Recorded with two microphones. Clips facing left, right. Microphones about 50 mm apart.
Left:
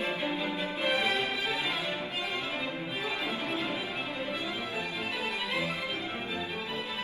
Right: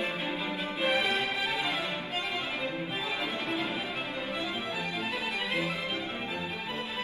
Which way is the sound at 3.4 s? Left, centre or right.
Right.